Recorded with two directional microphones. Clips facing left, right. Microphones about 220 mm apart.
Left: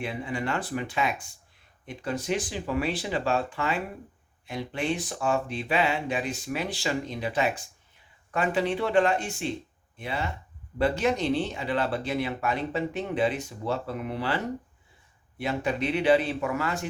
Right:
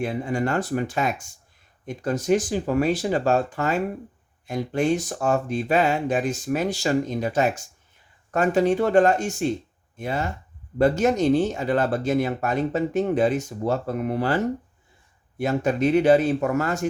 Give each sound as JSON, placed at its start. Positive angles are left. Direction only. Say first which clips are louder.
{"t": 0.0, "sound": "speech", "louder": "right 6 dB", "side_deg": -45}